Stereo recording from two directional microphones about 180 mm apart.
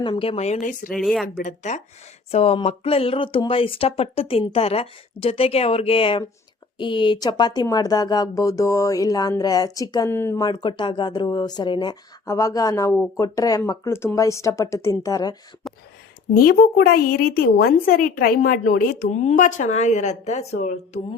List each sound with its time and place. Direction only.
0.0 s speech: 30° left (ahead or behind); by 0.9 s 45° left (ahead or behind)
0.9 s speech: centre (ahead or behind)
1.4 s a woman's voice: 45° left (ahead or behind); by 15.4 s 20° left (ahead or behind)
15.6 s a sound: centre (ahead or behind)
16.3 s a woman's voice: 55° left (ahead or behind); by 21.0 s 40° left (ahead or behind)